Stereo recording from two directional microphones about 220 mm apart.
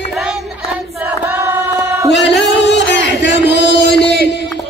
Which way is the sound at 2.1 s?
50° left (ahead or behind).